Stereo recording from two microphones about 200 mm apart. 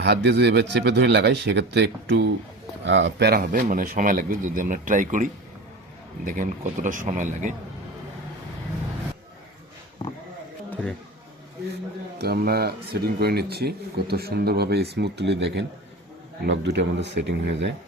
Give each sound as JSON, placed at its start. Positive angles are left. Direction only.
{"t": 0.0, "sound": "speech", "side_deg": -55}
{"t": 10.7, "sound": "a sound", "side_deg": 5}
{"t": 12.2, "sound": "speech", "side_deg": -50}